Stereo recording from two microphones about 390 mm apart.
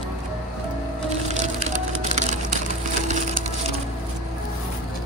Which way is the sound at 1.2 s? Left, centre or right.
Centre.